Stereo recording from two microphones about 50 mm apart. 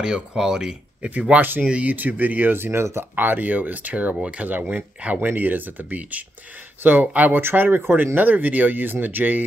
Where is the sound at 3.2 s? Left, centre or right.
Right.